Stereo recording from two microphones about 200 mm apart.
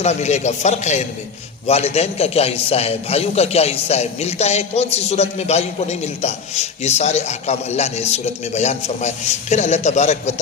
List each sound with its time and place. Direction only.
0.0 s a man's voice: 35° left (ahead or behind)